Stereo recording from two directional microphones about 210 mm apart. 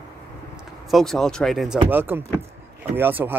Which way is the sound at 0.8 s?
Centre (ahead or behind).